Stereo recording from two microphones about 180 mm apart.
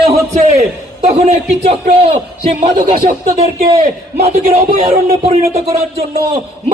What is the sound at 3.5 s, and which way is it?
Speech, 55° right (ahead or behind).